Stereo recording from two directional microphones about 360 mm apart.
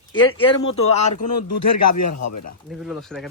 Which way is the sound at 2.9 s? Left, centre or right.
Centre.